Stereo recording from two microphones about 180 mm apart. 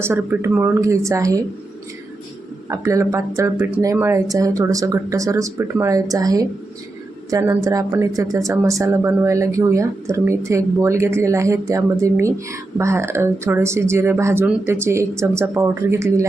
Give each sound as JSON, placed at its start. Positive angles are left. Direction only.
{"t": 0.0, "sound": "a woman's voice", "side_deg": -15}
{"t": 2.6, "sound": "a woman's voice", "side_deg": -15}